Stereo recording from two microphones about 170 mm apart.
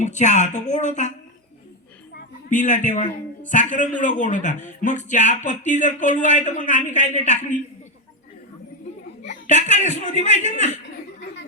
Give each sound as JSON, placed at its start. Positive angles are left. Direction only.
{"t": 0.0, "sound": "speech", "side_deg": 45}
{"t": 2.5, "sound": "speech", "side_deg": 45}
{"t": 9.2, "sound": "a sound", "side_deg": 45}
{"t": 9.6, "sound": "speech", "side_deg": 45}